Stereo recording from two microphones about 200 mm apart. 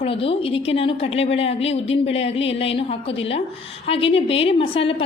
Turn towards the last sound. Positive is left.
turn(degrees=25)  # may be behind; listen again after turning